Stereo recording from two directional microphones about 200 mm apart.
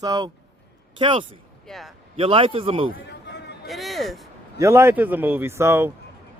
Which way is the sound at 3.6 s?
Centre (ahead or behind).